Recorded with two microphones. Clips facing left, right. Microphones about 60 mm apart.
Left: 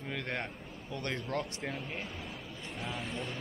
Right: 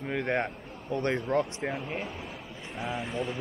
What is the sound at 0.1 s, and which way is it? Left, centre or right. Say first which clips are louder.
Speech: right 9 dB; right.